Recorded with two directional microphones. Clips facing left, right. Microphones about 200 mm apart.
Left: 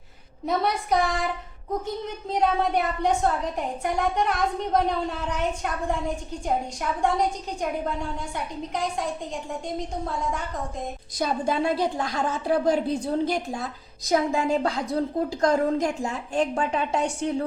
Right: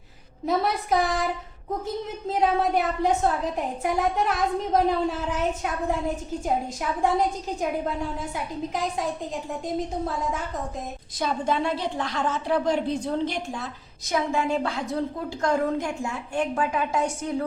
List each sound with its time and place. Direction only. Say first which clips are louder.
0.4 s a woman's voice: right 1 dB; centre (ahead or behind)
11.2 s a woman's voice: left 1 dB; 40° left (ahead or behind)